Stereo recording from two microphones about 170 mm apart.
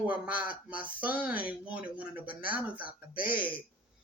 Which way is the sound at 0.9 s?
10° right (ahead or behind).